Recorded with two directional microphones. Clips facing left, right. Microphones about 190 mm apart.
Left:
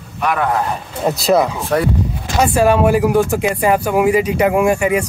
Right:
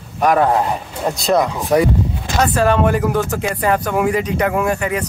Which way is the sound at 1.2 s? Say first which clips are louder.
Left 2 dB; 5° left (ahead or behind).